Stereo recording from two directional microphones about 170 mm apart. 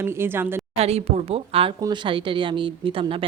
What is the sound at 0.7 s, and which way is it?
A woman's voice, 40° right (ahead or behind).